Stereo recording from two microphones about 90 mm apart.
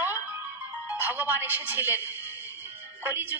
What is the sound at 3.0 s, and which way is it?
Speech, 20° right (ahead or behind).